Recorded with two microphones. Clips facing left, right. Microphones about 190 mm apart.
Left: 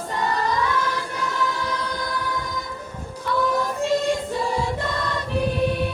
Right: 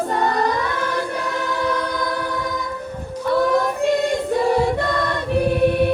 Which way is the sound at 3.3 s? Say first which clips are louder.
Right 4 dB; 60° right (ahead or behind).